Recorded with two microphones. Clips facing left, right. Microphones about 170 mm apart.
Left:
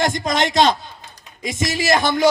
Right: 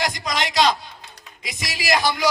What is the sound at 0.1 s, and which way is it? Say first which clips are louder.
Speech: left 6 dB; 50° left (ahead or behind).